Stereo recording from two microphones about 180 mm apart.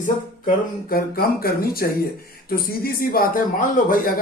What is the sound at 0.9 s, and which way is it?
Speech, 55° left (ahead or behind).